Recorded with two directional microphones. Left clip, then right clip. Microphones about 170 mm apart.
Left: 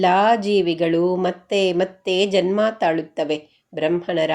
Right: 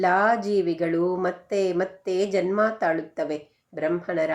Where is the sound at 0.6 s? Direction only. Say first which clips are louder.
Left 5 dB; 55° left (ahead or behind).